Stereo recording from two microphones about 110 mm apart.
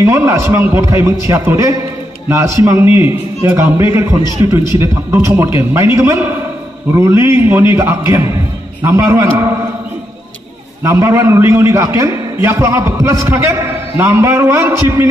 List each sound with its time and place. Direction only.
0.0 s a man's voice: 25° right (ahead or behind)
10.8 s a man's voice: 30° right (ahead or behind)